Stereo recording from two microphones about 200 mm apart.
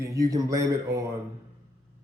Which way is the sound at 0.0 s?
15° right (ahead or behind).